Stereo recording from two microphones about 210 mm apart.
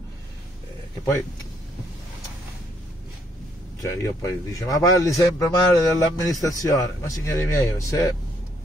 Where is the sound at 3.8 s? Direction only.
15° left (ahead or behind).